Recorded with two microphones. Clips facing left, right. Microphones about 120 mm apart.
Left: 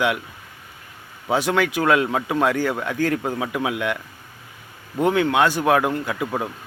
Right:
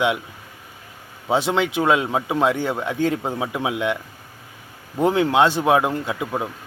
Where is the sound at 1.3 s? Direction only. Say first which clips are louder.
Even; 25° right (ahead or behind).